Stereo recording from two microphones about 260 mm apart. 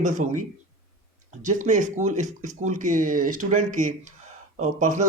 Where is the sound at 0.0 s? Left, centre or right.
Right.